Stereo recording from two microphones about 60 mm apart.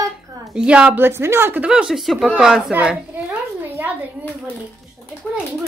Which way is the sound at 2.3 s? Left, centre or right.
Centre.